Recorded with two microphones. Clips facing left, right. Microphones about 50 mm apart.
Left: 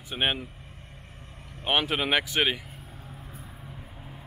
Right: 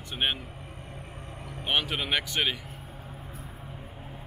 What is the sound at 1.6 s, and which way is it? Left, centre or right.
Speech, centre.